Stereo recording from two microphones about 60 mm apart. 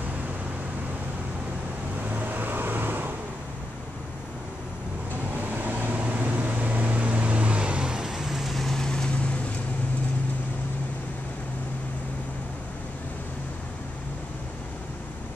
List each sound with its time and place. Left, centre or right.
2.1 s vehicle: right
5.4 s vehicle: right; by 9.2 s centre